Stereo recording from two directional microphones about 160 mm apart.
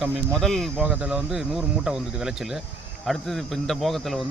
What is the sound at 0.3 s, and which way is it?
Speech, centre (ahead or behind).